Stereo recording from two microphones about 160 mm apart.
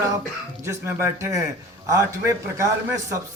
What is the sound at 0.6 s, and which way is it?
A man's voice, 15° right (ahead or behind).